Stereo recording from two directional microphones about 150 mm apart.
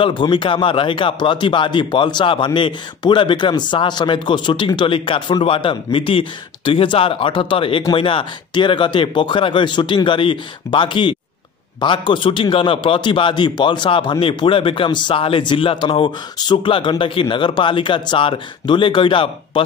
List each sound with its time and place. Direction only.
0.0 s speech: 35° left (ahead or behind)